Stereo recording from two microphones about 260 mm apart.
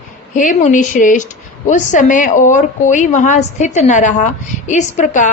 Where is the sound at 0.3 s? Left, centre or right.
Left.